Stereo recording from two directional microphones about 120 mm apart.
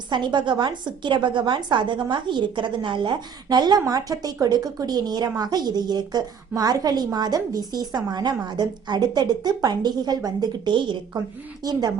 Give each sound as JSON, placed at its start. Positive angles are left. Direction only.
{"t": 0.1, "sound": "a woman's voice", "side_deg": -40}